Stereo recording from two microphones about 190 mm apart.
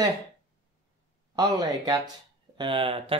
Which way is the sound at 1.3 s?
20° right (ahead or behind).